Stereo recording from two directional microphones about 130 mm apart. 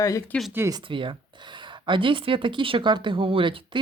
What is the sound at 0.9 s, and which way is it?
Speech, 40° right (ahead or behind).